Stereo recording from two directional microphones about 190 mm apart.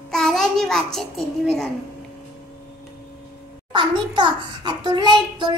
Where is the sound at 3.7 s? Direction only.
25° right (ahead or behind).